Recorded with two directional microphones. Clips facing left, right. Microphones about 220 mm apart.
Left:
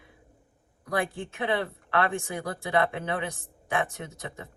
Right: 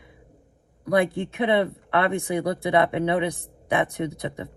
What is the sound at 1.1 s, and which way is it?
Speech, 15° right (ahead or behind).